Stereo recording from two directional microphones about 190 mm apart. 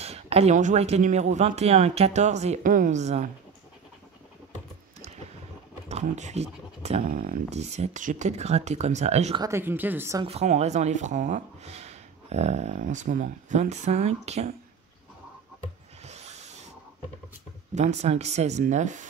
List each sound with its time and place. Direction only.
0.0 s speech: 35° right (ahead or behind)
5.9 s speech: 35° right (ahead or behind)
9.4 s a woman's voice: 15° right (ahead or behind)
10.2 s speech: 35° right (ahead or behind)
16.0 s mechanisms: 35° right (ahead or behind)
17.7 s speech: 35° right (ahead or behind)